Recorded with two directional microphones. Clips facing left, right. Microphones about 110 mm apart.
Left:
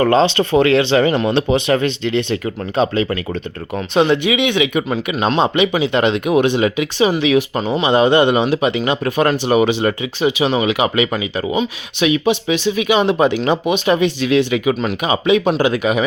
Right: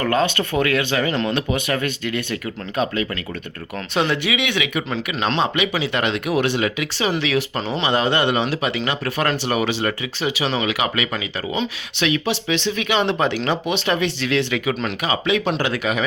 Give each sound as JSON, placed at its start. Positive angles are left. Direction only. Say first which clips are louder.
{"t": 0.0, "sound": "speech", "louder": "left 6 dB", "side_deg": 25}
{"t": 11.5, "sound": "speech", "louder": "left 5 dB", "side_deg": 15}